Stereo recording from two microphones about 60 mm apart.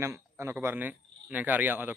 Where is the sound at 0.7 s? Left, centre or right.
Right.